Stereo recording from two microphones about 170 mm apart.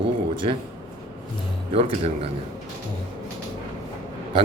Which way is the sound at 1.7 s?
35° right (ahead or behind).